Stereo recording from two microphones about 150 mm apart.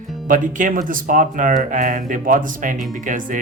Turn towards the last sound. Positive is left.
turn(degrees=-60)  # may be behind; listen again after turning